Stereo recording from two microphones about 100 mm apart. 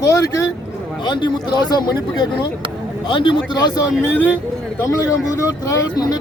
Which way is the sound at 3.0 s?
55° left (ahead or behind).